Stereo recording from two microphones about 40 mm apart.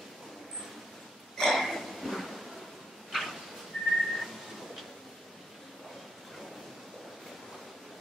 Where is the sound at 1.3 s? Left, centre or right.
Centre.